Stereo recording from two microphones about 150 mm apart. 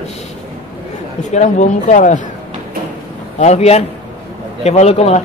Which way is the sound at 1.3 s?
50° left (ahead or behind).